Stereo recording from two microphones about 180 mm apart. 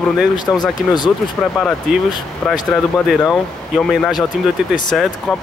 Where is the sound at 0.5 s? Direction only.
10° left (ahead or behind).